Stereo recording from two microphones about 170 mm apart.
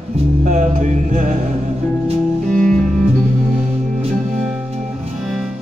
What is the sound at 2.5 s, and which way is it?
Music, 5° left (ahead or behind).